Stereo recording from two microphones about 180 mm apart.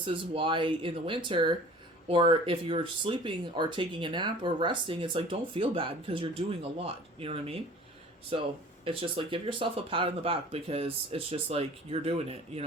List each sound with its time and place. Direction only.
0.0 s speech: 30° right (ahead or behind)